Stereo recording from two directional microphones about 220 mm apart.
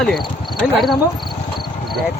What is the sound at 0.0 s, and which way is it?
Speech, centre (ahead or behind).